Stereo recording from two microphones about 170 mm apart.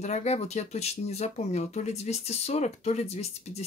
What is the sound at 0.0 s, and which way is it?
Speech, 40° left (ahead or behind).